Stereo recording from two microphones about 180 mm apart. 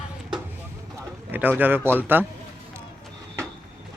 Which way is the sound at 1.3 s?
10° right (ahead or behind).